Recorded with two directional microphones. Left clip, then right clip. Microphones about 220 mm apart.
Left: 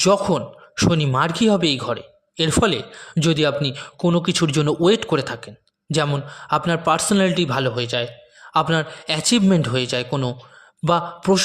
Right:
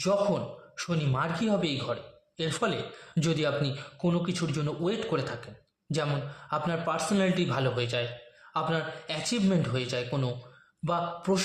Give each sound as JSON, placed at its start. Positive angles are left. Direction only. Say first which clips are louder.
{"t": 0.0, "sound": "speech", "louder": "left 9 dB", "side_deg": 45}